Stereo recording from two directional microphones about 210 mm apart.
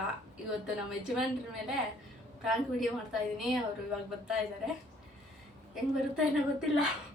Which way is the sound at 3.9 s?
5° right (ahead or behind).